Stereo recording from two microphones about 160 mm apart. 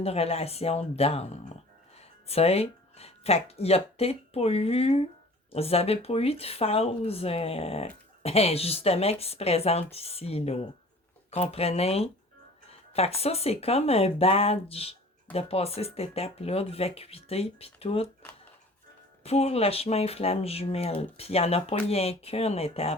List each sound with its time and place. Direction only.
0.0 s speech: 40° left (ahead or behind)
19.2 s speech: 40° left (ahead or behind)